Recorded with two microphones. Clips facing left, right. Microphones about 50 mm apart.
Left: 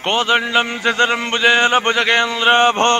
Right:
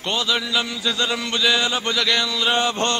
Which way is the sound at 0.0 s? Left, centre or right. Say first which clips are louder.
Left 7 dB; left.